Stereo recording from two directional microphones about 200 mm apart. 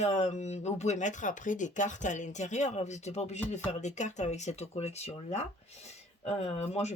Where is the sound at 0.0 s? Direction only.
35° left (ahead or behind).